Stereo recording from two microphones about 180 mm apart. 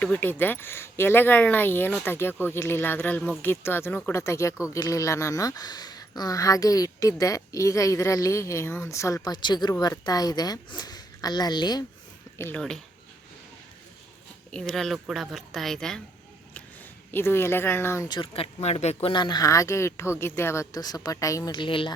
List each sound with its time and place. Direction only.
0.0 s speech: 10° left (ahead or behind)
12.4 s speech: 10° left (ahead or behind)
14.5 s speech: 5° left (ahead or behind)
17.1 s speech: 10° left (ahead or behind); by 21.9 s 25° left (ahead or behind)